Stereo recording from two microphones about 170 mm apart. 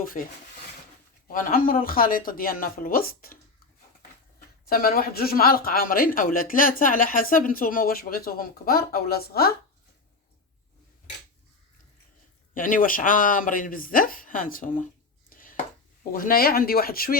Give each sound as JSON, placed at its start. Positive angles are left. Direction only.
{"t": 0.2, "sound": "speech", "side_deg": 50}
{"t": 4.6, "sound": "speech", "side_deg": 60}
{"t": 12.5, "sound": "speech", "side_deg": 55}
{"t": 15.3, "sound": "a sound", "side_deg": 55}
{"t": 16.1, "sound": "speech", "side_deg": 60}